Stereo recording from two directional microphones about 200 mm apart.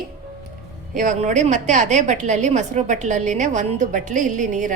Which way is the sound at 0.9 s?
40° right (ahead or behind).